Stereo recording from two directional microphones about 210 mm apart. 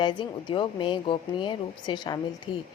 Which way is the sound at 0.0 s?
20° left (ahead or behind).